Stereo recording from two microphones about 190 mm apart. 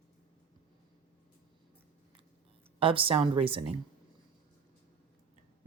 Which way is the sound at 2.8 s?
30° right (ahead or behind).